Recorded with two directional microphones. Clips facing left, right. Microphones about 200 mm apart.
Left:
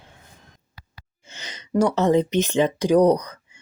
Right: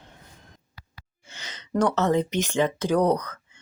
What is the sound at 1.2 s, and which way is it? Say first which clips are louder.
Speech: left 3 dB; 20° left (ahead or behind).